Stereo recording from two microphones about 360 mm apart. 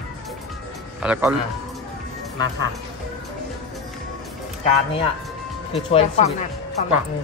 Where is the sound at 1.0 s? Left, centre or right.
Centre.